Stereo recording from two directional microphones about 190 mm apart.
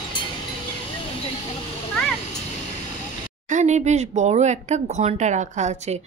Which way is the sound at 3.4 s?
40° right (ahead or behind).